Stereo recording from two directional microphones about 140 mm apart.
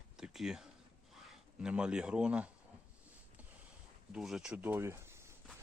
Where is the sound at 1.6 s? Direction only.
5° right (ahead or behind).